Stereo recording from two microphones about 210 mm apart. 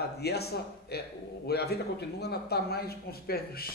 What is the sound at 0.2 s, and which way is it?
A man's voice, 50° left (ahead or behind).